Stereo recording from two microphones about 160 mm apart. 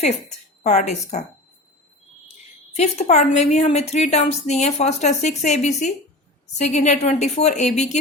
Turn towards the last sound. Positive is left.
turn(degrees=45)  # may be behind; listen again after turning